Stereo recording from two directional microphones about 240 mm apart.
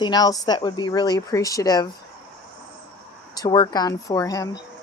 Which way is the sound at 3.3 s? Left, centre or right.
Centre.